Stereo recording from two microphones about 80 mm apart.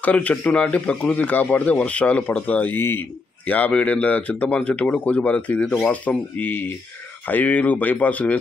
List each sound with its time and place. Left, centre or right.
0.0 s speech: centre